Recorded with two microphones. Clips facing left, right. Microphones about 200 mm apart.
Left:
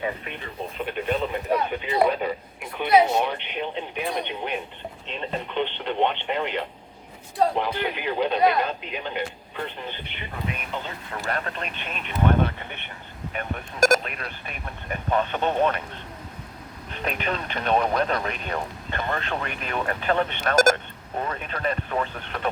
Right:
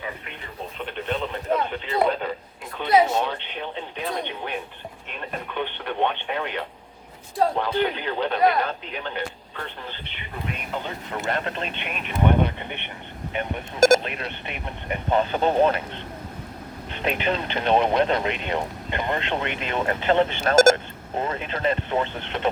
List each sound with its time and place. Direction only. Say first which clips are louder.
0.9 s radio: left 2 dB; 10° left (ahead or behind)
2.7 s speech: even; 15° left (ahead or behind)
10.8 s speech: right 3 dB; 20° right (ahead or behind)
16.9 s speech: right 3 dB; 25° right (ahead or behind)